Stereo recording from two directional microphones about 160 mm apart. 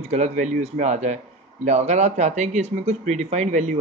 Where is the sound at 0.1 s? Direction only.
45° right (ahead or behind).